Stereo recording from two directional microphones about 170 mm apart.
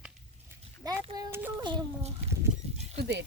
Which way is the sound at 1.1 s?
20° right (ahead or behind).